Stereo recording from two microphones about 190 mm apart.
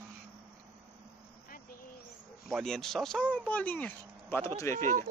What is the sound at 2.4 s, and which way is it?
Speech, centre (ahead or behind).